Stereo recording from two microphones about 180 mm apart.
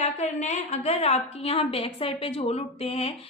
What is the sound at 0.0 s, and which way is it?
A woman's voice, 40° left (ahead or behind).